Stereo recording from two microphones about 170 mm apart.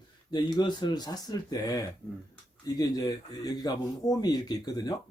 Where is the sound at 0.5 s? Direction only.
25° left (ahead or behind).